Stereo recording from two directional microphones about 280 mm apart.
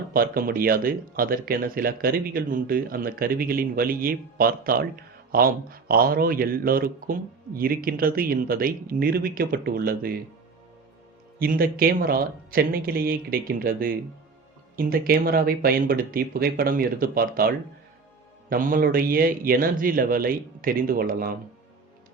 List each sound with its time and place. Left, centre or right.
0.1 s speech: right
11.3 s speech: right